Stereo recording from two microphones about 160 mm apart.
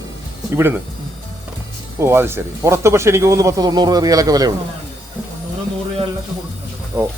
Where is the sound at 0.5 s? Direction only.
15° right (ahead or behind).